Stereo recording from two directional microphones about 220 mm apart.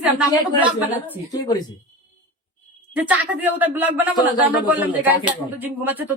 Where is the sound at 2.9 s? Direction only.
5° right (ahead or behind).